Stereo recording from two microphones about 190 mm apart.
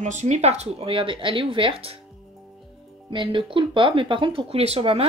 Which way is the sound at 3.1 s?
25° right (ahead or behind).